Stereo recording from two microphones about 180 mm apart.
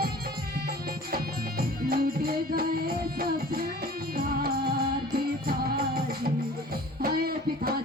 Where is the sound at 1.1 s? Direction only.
55° right (ahead or behind).